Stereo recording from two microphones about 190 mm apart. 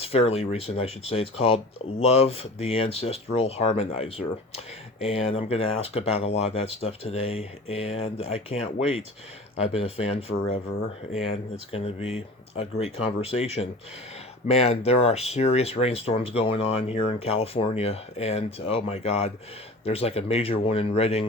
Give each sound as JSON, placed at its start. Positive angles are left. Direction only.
{"t": 0.0, "sound": "speech", "side_deg": 30}
{"t": 11.7, "sound": "speech", "side_deg": 35}